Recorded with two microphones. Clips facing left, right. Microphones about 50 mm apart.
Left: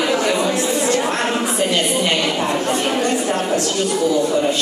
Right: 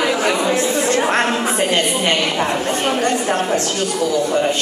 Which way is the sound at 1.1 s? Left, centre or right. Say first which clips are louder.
Right 2 dB; right.